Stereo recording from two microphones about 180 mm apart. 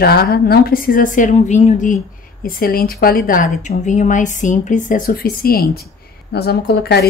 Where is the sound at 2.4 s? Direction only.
55° left (ahead or behind).